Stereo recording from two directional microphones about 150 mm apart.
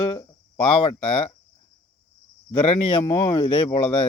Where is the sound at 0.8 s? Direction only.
45° left (ahead or behind).